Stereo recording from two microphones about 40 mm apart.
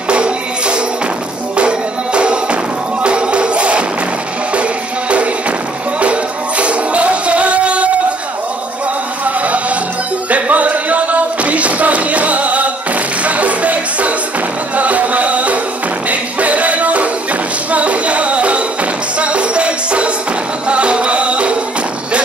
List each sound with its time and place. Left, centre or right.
0.1 s music: right
6.6 s music: right
9.2 s music: right